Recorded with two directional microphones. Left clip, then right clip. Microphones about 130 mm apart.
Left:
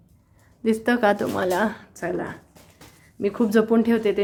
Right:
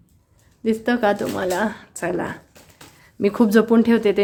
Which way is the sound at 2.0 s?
30° right (ahead or behind).